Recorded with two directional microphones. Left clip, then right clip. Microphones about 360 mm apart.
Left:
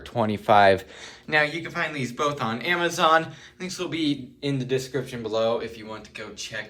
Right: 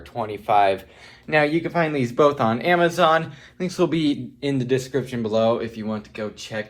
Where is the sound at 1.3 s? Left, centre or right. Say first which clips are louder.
Right 4 dB; centre.